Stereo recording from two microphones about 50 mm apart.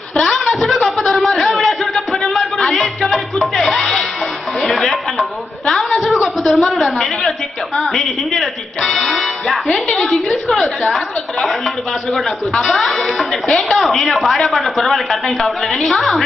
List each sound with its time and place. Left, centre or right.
0.1 s a sound: centre
4.6 s music: centre
5.7 s a woman's voice: centre
12.6 s a woman's voice: centre